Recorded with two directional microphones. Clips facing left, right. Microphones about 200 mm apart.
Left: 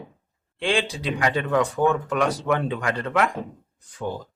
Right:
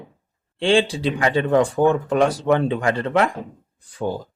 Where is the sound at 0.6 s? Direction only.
30° right (ahead or behind).